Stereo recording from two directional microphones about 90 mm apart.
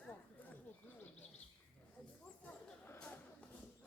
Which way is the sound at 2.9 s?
15° left (ahead or behind).